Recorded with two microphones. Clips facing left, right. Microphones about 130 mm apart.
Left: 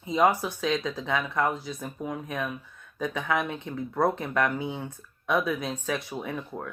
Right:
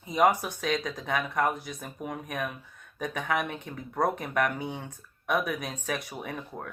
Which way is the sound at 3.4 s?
25° left (ahead or behind).